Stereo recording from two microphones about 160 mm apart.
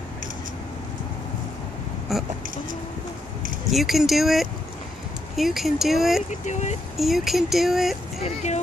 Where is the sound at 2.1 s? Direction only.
Centre (ahead or behind).